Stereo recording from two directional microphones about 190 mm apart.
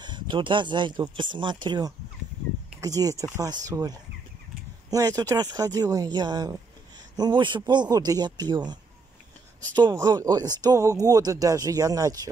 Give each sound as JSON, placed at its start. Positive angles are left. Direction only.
{"t": 0.0, "sound": "speech", "side_deg": -25}
{"t": 9.8, "sound": "speech", "side_deg": -20}